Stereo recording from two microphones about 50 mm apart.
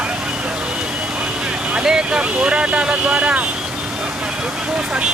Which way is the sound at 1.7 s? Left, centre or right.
Centre.